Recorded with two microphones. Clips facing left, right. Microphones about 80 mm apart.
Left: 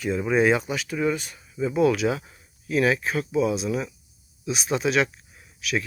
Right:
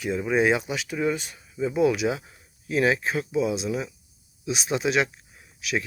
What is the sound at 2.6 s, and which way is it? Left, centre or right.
Speech, right.